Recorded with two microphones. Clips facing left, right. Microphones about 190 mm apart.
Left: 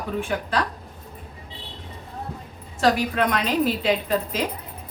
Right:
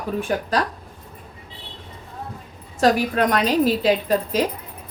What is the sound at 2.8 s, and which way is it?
A woman's voice, 40° right (ahead or behind).